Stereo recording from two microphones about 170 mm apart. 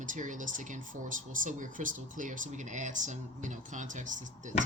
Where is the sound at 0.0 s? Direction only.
50° right (ahead or behind).